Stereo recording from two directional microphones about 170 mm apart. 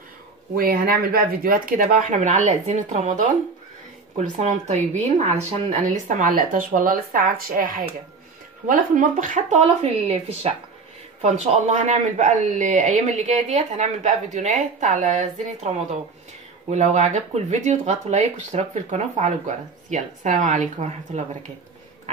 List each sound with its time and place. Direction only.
0.6 s speech: 60° right (ahead or behind); by 3.3 s 45° right (ahead or behind)
4.4 s speech: 45° right (ahead or behind)